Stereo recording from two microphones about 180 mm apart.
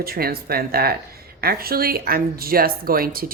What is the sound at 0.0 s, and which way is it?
Speech, 55° right (ahead or behind).